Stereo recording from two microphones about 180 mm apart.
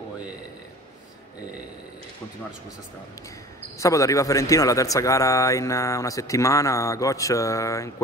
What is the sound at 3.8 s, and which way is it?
A man's voice, 15° left (ahead or behind).